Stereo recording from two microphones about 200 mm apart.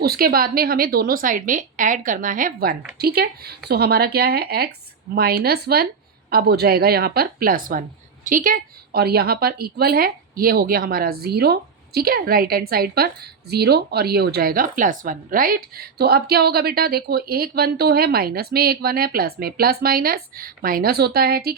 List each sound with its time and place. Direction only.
0.0 s speech: 50° right (ahead or behind)